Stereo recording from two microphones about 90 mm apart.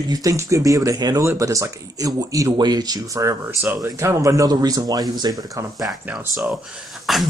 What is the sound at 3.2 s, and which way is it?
Speech, 25° right (ahead or behind).